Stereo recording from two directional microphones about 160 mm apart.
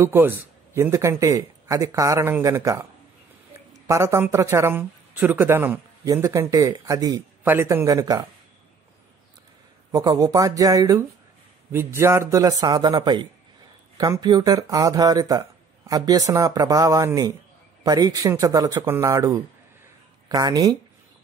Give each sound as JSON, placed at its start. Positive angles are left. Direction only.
{"t": 0.0, "sound": "speech", "side_deg": -15}
{"t": 9.8, "sound": "speech", "side_deg": -20}